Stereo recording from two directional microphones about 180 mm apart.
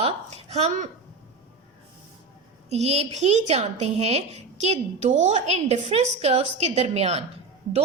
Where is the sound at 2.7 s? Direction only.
35° right (ahead or behind).